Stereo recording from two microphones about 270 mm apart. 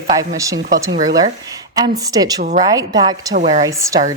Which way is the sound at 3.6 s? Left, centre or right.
Centre.